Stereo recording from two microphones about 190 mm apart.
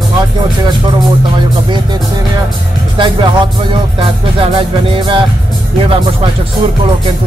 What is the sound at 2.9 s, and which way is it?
Music, 25° right (ahead or behind).